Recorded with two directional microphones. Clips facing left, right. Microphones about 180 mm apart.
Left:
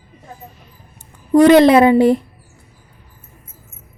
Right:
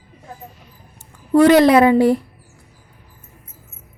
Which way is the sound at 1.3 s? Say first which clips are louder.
Left 2 dB; 20° left (ahead or behind).